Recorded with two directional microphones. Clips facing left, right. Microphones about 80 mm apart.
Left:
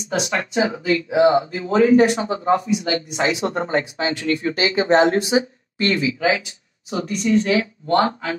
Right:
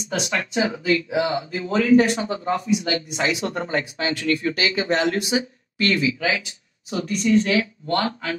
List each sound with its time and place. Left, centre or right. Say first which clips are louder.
0.2 s speech: left 2 dB; left